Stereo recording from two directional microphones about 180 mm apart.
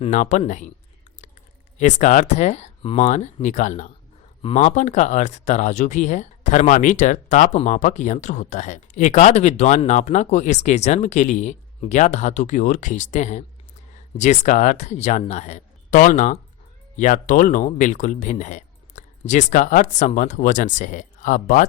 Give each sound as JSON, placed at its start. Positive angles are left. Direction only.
{"t": 0.0, "sound": "speech", "side_deg": 40}
{"t": 1.8, "sound": "speech", "side_deg": 40}